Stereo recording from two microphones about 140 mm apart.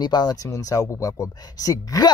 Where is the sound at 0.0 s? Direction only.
30° left (ahead or behind).